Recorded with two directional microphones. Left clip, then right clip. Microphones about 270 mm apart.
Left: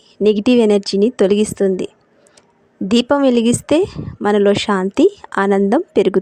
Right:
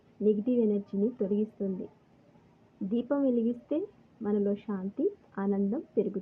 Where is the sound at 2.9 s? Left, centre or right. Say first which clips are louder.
Left 16 dB; left.